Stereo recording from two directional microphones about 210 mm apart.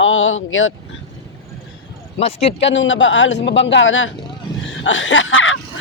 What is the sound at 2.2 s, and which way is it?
Speech, 30° left (ahead or behind).